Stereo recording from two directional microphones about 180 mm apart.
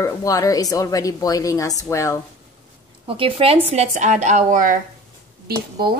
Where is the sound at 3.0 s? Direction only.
30° right (ahead or behind).